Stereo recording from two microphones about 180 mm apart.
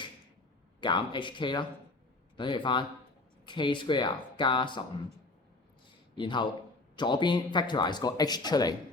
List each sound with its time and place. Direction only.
0.8 s speech: 25° left (ahead or behind)
6.1 s speech: 25° left (ahead or behind)